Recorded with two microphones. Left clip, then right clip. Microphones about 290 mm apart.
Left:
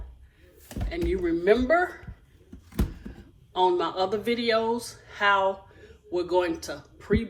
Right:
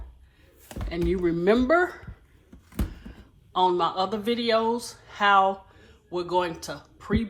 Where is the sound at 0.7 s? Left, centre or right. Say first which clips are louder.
Right 1 dB; centre.